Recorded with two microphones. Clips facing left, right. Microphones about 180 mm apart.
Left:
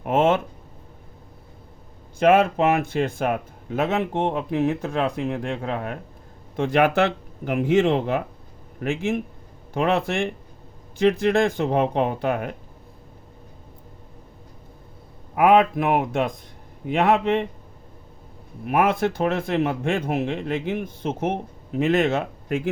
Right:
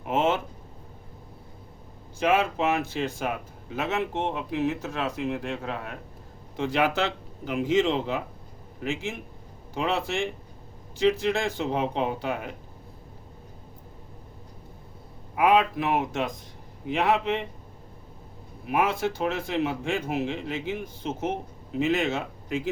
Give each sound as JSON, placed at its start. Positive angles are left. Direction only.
{"t": 0.0, "sound": "a sound", "side_deg": 55}
{"t": 2.1, "sound": "speech", "side_deg": 55}
{"t": 15.4, "sound": "speech", "side_deg": 55}
{"t": 18.6, "sound": "speech", "side_deg": 55}